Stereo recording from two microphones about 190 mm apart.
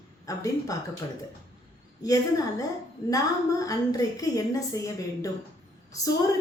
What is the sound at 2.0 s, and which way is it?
A woman's voice, 20° left (ahead or behind).